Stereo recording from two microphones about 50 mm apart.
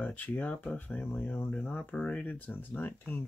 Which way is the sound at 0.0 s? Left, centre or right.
Left.